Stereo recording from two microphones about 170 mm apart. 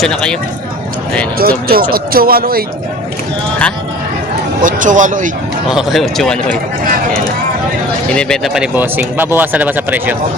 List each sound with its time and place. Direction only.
0.0 s speech: 5° left (ahead or behind)
1.4 s a man's voice: 60° right (ahead or behind)
4.6 s speech: 50° right (ahead or behind)
5.6 s speech: centre (ahead or behind)
8.1 s speech: 5° left (ahead or behind)